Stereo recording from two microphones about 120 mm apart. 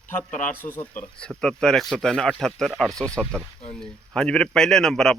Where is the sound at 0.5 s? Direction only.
20° left (ahead or behind).